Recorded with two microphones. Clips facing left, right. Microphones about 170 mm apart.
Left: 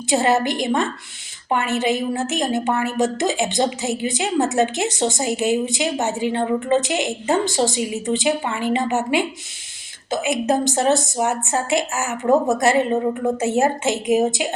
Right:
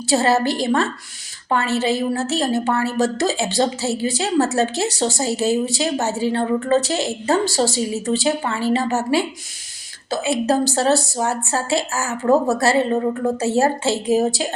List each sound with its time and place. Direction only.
0.1 s a woman's voice: 15° left (ahead or behind)